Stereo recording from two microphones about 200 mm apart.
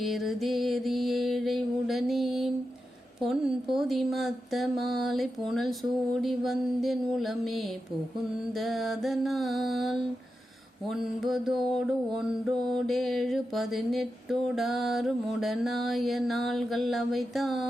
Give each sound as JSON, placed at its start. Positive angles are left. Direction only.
{"t": 0.0, "sound": "mantra", "side_deg": 0}